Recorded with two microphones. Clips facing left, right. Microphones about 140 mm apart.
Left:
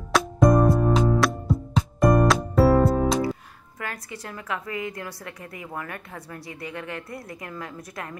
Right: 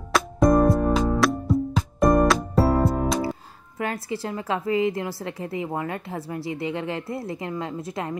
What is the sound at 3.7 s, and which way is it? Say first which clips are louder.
A woman's voice: right 8 dB; 25° right (ahead or behind).